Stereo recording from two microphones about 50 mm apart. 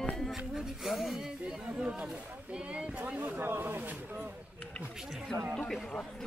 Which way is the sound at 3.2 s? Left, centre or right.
Right.